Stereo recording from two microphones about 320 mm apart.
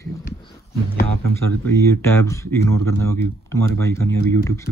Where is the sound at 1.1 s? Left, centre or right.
Right.